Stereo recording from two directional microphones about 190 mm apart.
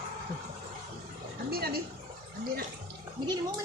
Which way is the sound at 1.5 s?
55° right (ahead or behind).